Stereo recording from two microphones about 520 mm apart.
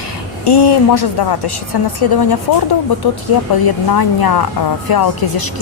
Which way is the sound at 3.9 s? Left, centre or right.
Left.